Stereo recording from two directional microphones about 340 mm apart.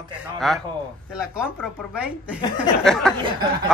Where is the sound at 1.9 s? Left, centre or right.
Centre.